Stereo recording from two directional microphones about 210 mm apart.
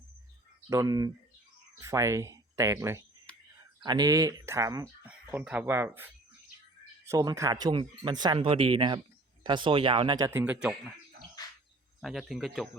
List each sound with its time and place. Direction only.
0.7 s speech: 15° right (ahead or behind)
11.9 s speech: centre (ahead or behind)